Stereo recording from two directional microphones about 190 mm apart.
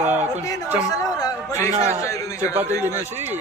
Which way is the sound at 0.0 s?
35° right (ahead or behind).